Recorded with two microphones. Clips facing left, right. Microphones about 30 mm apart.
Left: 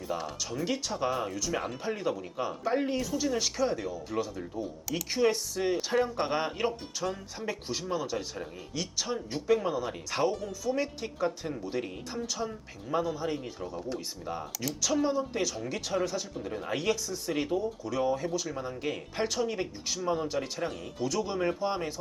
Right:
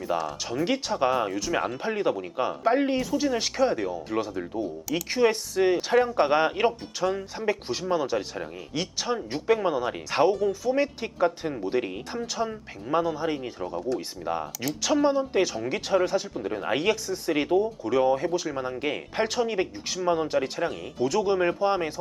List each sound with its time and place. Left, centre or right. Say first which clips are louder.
0.1 s speech: right 6 dB; right